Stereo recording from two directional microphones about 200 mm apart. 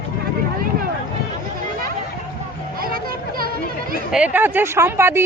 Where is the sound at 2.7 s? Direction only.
45° right (ahead or behind).